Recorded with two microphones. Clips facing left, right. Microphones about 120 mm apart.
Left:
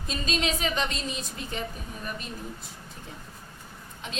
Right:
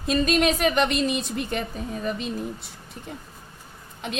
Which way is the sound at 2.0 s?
85° right.